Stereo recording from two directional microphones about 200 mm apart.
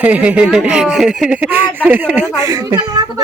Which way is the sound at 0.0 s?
5° right (ahead or behind).